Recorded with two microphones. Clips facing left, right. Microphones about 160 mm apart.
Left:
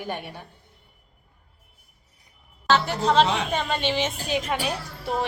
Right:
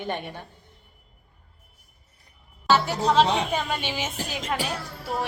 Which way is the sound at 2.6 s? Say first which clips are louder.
Even; 5° right (ahead or behind).